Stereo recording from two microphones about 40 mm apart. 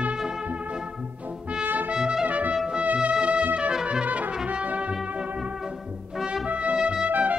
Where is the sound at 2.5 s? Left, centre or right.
Centre.